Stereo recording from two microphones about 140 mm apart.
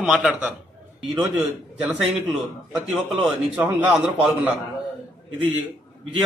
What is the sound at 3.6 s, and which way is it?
Speech, 10° right (ahead or behind).